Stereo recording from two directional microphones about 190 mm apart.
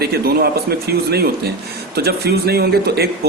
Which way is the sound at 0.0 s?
55° right (ahead or behind).